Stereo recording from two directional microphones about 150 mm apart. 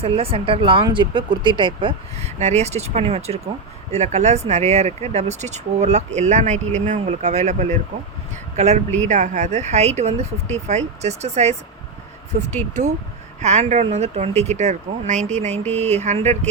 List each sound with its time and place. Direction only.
0.0 s speech: 40° right (ahead or behind)
2.1 s speech: 50° right (ahead or behind)